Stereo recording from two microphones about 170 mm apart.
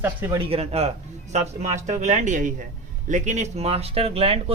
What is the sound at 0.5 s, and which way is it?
Speech, 35° right (ahead or behind).